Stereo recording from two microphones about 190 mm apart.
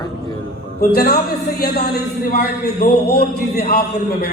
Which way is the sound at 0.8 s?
55° left (ahead or behind).